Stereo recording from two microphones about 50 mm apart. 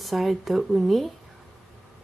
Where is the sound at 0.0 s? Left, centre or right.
Centre.